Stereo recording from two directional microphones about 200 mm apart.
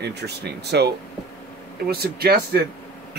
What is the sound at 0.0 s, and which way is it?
Speech, 55° right (ahead or behind).